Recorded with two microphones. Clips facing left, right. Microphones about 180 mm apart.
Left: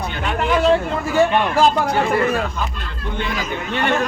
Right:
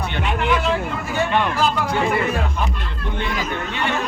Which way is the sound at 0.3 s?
35° left (ahead or behind).